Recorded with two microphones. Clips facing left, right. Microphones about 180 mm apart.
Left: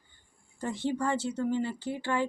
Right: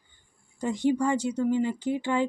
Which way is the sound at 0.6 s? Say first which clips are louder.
Right 6 dB; 15° right (ahead or behind).